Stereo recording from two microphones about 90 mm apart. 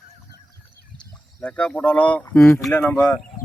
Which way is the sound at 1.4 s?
10° left (ahead or behind).